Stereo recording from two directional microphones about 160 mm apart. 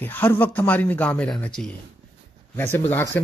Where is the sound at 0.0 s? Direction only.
10° left (ahead or behind).